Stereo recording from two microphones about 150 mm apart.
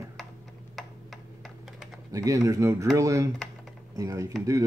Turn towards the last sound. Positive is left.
turn(degrees=-25)  # may be behind; listen again after turning